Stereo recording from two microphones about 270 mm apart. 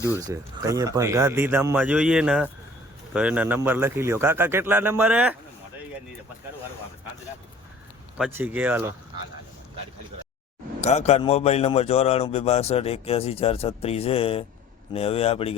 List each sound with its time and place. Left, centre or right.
0.2 s speech: centre
8.2 s speech: centre
10.8 s a man's voice: left